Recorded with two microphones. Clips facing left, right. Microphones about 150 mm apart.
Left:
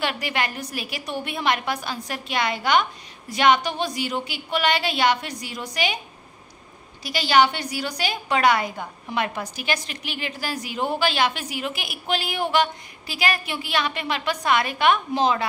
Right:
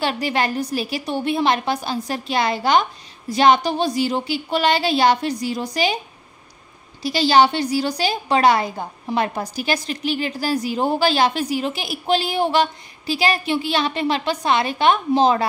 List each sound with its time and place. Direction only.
0.0 s a woman's voice: 35° right (ahead or behind)
7.0 s a woman's voice: 30° right (ahead or behind)